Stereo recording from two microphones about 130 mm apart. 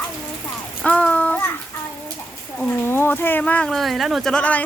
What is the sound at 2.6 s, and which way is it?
Speech, 15° left (ahead or behind).